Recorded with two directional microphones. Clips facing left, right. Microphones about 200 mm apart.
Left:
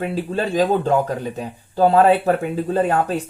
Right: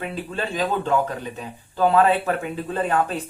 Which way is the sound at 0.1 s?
40° left (ahead or behind).